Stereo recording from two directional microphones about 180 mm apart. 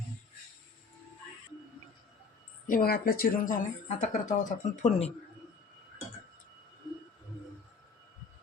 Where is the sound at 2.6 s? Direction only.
50° left (ahead or behind); by 5.1 s 35° left (ahead or behind).